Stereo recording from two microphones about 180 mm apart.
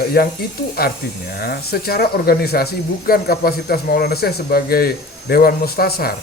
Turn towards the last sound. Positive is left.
turn(degrees=60)  # may be behind; listen again after turning